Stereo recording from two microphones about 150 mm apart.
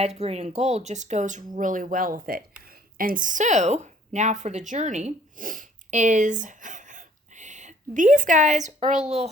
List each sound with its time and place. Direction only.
0.0 s a woman's voice: 45° right (ahead or behind)